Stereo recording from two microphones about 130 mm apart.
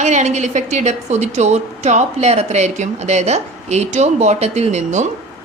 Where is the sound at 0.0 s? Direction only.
65° right (ahead or behind).